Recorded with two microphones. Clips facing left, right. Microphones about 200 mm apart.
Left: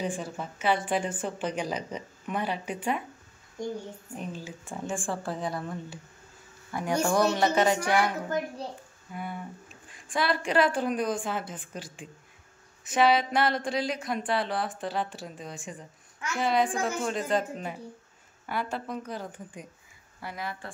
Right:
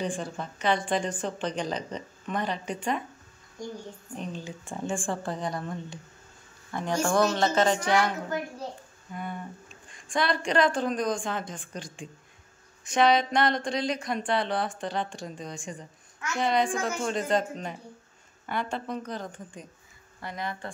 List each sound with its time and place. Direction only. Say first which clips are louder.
0.0 s a woman's voice: right 1 dB; 5° left (ahead or behind)
4.1 s a woman's voice: right 2 dB; 10° left (ahead or behind)
9.1 s a woman's voice: right 1 dB; 10° left (ahead or behind)